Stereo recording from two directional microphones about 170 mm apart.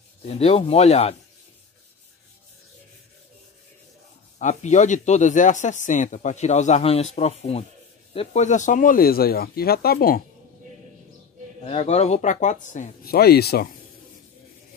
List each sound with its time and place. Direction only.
0.4 s speech: 35° left (ahead or behind)
4.4 s speech: 45° left (ahead or behind); by 10.2 s 60° left (ahead or behind)
11.6 s speech: 35° left (ahead or behind)
13.0 s speech: 65° left (ahead or behind)